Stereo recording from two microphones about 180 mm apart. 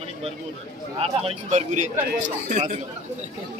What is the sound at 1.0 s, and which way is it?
Speech, 30° right (ahead or behind).